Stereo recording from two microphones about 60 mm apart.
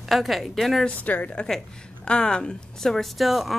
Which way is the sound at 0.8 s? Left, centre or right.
Left.